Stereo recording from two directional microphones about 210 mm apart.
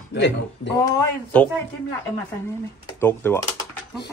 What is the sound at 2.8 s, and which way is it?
Speech, 10° left (ahead or behind).